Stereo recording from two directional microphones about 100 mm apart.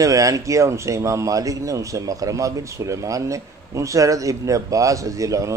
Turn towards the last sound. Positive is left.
turn(degrees=-35)  # may be behind; listen again after turning